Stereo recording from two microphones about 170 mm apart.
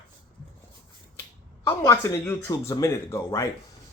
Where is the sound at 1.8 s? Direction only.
20° left (ahead or behind).